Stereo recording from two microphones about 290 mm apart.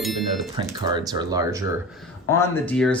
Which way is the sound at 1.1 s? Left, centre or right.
Centre.